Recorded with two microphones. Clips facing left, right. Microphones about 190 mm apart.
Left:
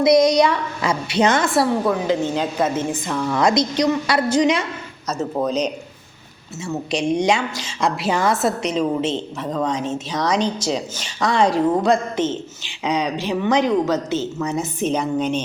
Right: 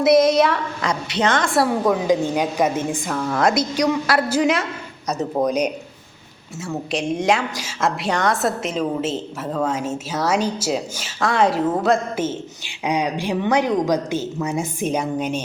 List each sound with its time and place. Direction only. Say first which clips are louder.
0.0 s a woman's voice: even; 5° right (ahead or behind)
0.8 s a woman's voice: left 6 dB; 10° left (ahead or behind)
1.9 s a woman's voice: right 1 dB; 15° right (ahead or behind)
5.0 s a woman's voice: right 1 dB; 15° right (ahead or behind)
6.6 s a woman's voice: left 2 dB; centre (ahead or behind)